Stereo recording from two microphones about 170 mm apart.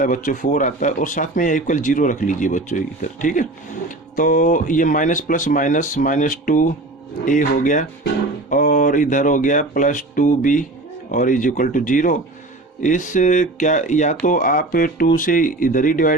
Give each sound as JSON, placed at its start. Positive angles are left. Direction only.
{"t": 0.0, "sound": "speech", "side_deg": 50}